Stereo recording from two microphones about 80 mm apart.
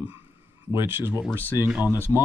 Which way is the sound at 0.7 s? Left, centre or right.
Right.